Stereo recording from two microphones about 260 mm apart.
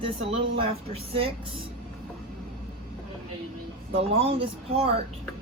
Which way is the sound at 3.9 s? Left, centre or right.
Right.